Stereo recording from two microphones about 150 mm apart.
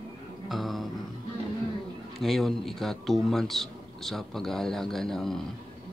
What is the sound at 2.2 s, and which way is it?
Speech, centre (ahead or behind).